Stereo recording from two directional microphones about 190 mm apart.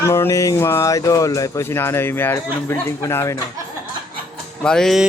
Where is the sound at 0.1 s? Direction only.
15° left (ahead or behind).